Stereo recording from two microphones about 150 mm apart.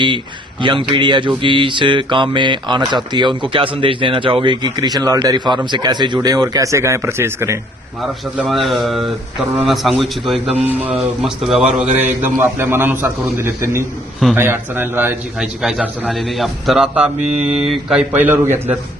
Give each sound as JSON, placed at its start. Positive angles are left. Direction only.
{"t": 0.6, "sound": "mantra", "side_deg": -35}
{"t": 8.4, "sound": "a man's voice", "side_deg": 0}